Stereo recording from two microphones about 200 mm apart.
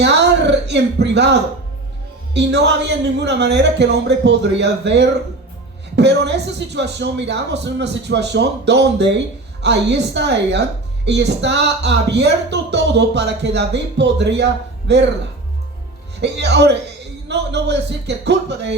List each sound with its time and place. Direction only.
0.0 s a sound: 60° right (ahead or behind)
2.3 s speech: 60° right (ahead or behind)
16.2 s speech: 60° right (ahead or behind)